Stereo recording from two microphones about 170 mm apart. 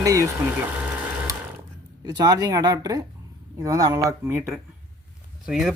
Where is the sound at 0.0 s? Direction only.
20° right (ahead or behind).